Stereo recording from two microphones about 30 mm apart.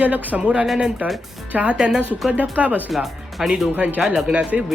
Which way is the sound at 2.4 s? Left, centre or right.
Right.